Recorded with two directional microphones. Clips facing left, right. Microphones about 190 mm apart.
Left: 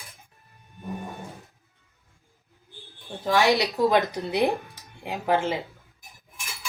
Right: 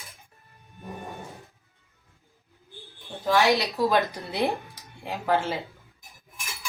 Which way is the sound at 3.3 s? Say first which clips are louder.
Left 1 dB; 15° left (ahead or behind).